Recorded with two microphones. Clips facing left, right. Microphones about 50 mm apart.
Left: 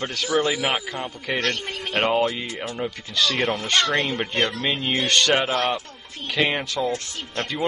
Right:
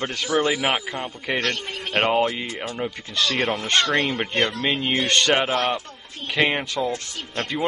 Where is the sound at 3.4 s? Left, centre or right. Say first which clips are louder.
Right 1 dB; centre.